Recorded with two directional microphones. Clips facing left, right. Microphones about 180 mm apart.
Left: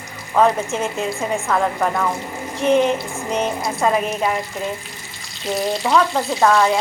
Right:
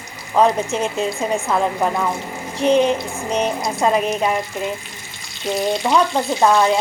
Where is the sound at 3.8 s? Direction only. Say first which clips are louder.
Right 1 dB; 20° right (ahead or behind).